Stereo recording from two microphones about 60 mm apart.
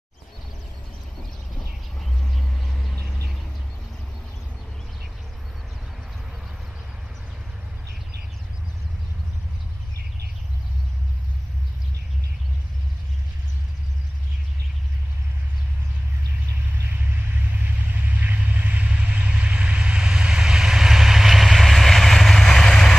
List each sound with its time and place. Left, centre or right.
2.0 s vehicle: centre
3.0 s vehicle: left
17.6 s vehicle: right; by 22.9 s centre